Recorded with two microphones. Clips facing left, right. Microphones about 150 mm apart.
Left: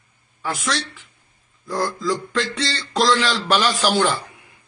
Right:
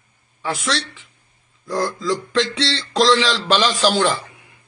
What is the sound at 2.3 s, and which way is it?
A man's voice, 90° right.